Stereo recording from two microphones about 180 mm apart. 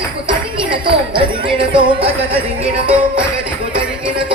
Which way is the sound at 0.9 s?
30° right (ahead or behind).